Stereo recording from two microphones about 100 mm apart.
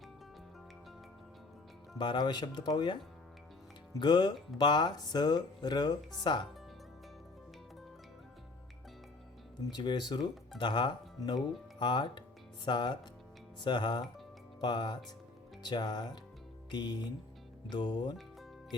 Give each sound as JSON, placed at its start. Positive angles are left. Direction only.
{"t": 2.0, "sound": "speech", "side_deg": 50}
{"t": 4.0, "sound": "speech", "side_deg": 45}
{"t": 9.6, "sound": "speech", "side_deg": 45}